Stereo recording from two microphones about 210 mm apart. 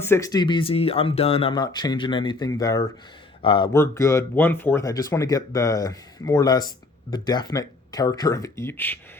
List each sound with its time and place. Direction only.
0.0 s speech: 15° left (ahead or behind)
3.7 s speech: 15° left (ahead or behind)